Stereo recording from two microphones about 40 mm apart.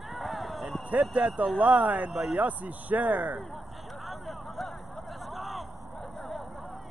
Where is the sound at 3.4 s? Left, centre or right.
Centre.